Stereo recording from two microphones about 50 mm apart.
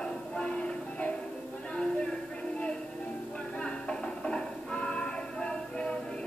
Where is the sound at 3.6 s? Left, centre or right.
Centre.